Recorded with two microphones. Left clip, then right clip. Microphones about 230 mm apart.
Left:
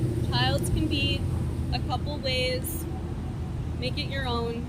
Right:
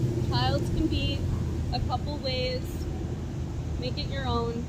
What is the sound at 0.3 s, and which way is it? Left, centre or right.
Vehicle, left.